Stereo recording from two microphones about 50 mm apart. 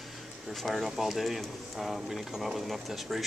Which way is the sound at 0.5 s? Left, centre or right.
Centre.